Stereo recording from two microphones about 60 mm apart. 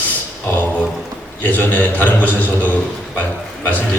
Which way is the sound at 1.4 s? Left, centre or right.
Left.